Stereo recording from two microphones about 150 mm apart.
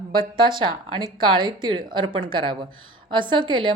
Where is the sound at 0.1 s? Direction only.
35° right (ahead or behind).